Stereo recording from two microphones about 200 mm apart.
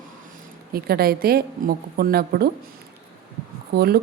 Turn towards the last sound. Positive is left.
turn(degrees=-50)  # may be behind; listen again after turning